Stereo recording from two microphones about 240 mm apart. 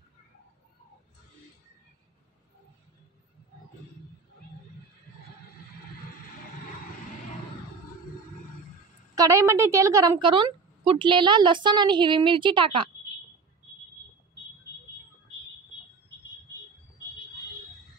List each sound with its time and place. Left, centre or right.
9.1 s a woman's voice: centre